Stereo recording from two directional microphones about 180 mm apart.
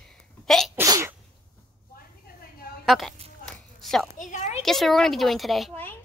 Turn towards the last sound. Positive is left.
turn(degrees=0)  # may be behind; listen again after turning